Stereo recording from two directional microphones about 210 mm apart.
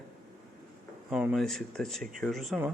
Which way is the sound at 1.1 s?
5° right (ahead or behind).